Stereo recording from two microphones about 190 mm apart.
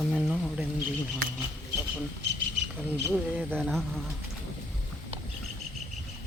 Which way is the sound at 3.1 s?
Centre (ahead or behind).